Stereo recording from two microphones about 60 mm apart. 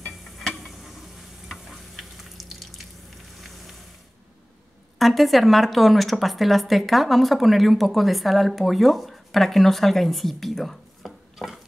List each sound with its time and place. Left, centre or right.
0.4 s a sound: centre
1.5 s frying: centre
3.3 s vehicle: centre
4.9 s a woman's voice: centre